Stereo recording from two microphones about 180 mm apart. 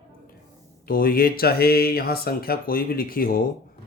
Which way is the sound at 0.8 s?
55° left (ahead or behind).